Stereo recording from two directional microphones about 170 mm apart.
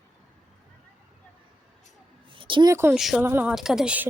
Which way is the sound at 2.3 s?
30° right (ahead or behind).